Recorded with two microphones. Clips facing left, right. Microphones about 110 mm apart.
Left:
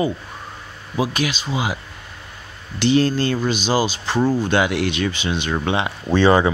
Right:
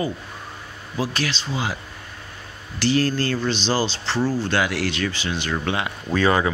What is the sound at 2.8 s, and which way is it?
Speech, 20° left (ahead or behind).